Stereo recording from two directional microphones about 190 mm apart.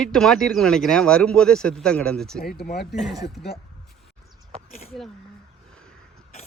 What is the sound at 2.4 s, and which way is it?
Speech, 55° left (ahead or behind).